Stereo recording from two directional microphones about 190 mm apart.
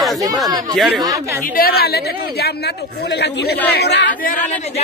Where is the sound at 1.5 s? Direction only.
55° left (ahead or behind).